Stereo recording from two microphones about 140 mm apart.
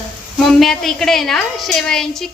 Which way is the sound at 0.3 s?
Centre (ahead or behind).